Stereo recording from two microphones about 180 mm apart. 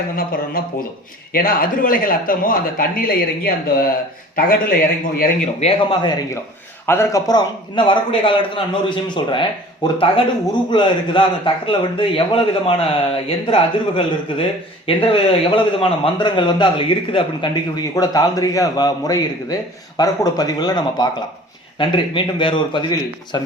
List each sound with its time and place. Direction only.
0.6 s speech: 55° left (ahead or behind)
5.5 s speech: 30° left (ahead or behind)
6.8 s speech: 15° left (ahead or behind)